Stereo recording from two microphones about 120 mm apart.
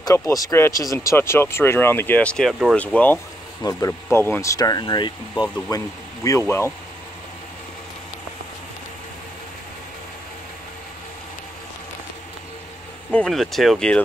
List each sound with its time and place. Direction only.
0.0 s speech: 30° left (ahead or behind); by 3.2 s 10° left (ahead or behind)
3.6 s speech: 25° left (ahead or behind)
6.2 s speech: 25° left (ahead or behind)
13.1 s speech: 5° left (ahead or behind)